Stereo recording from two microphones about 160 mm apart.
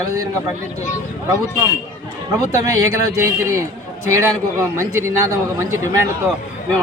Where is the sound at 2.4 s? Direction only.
20° right (ahead or behind).